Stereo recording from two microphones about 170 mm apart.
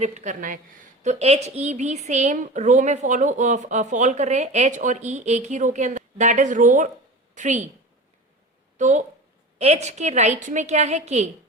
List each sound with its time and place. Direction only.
0.0 s a woman's voice: 45° right (ahead or behind)
1.0 s a woman's voice: 40° right (ahead or behind)
8.8 s a woman's voice: 45° right (ahead or behind)